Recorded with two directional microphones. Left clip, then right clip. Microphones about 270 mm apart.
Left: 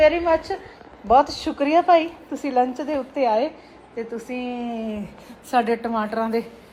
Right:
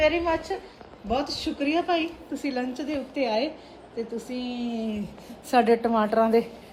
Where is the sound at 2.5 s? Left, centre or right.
Centre.